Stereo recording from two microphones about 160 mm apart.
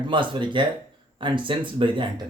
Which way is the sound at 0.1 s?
30° right (ahead or behind).